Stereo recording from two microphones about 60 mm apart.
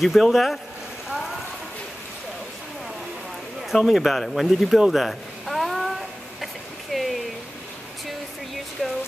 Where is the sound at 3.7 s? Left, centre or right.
Centre.